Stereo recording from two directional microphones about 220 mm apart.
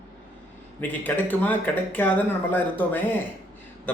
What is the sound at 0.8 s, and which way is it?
Speech, 10° left (ahead or behind).